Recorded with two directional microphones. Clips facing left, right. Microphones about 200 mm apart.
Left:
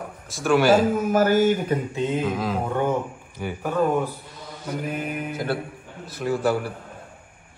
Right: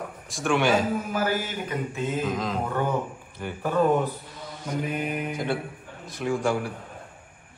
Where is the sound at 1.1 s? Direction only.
45° left (ahead or behind).